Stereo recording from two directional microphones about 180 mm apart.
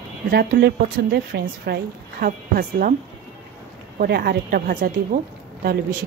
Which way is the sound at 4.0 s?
60° right (ahead or behind).